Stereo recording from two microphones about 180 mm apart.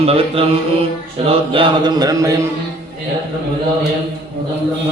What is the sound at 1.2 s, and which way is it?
Chant, 30° right (ahead or behind).